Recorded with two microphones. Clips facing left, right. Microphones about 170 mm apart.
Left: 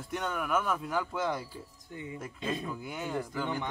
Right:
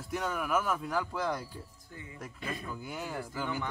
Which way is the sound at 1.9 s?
20° left (ahead or behind).